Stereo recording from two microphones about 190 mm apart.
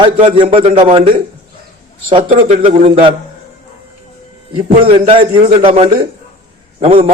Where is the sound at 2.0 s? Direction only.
25° right (ahead or behind).